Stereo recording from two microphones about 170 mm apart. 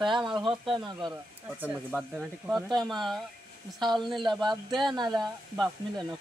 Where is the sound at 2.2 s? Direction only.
Centre (ahead or behind).